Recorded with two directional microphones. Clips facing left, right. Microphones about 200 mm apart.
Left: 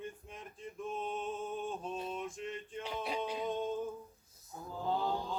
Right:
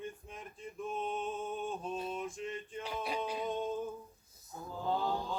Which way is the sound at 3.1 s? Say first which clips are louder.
Even; 20° left (ahead or behind).